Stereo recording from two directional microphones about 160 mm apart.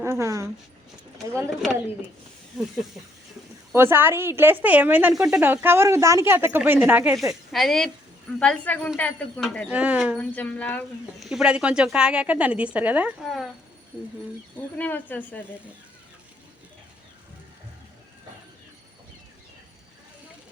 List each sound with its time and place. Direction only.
0.0 s speech: 15° right (ahead or behind)
3.8 s speech: 15° right (ahead or behind)
7.2 s speech: centre (ahead or behind)
9.6 s speech: 10° right (ahead or behind)
10.2 s speech: 10° left (ahead or behind)
11.3 s speech: 5° right (ahead or behind)
14.8 s speech: 10° left (ahead or behind)